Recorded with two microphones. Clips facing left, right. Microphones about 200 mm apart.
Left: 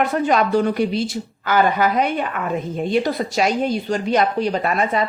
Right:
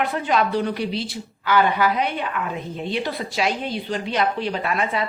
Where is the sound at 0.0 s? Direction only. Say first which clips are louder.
Left 4 dB; 45° left (ahead or behind).